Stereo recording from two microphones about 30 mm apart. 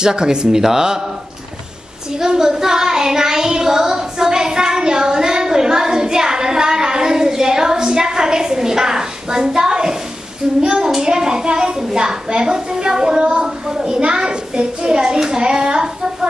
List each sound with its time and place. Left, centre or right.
0.0 s speech: right
2.1 s child singing: right
10.6 s a child's voice: right
12.3 s a woman's voice: right
12.5 s child singing: right
13.7 s a sound: centre